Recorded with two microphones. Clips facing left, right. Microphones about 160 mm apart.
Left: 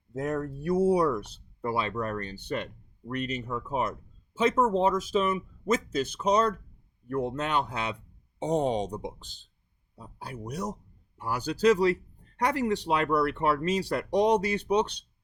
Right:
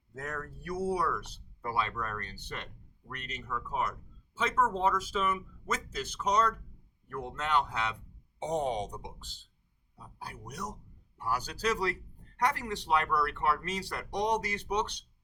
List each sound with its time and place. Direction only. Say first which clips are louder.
0.2 s speech: left 10 dB; 20° left (ahead or behind)
8.4 s speech: left 5 dB; 30° left (ahead or behind)
9.0 s speech: left 9 dB; 20° left (ahead or behind)